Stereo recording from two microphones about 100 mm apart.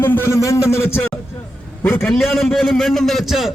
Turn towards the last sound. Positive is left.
turn(degrees=0)  # may be behind; listen again after turning